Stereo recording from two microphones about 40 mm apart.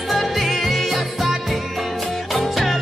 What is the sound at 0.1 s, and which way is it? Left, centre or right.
Music, centre.